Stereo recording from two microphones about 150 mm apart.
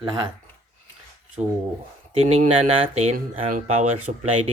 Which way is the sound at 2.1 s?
45° right (ahead or behind).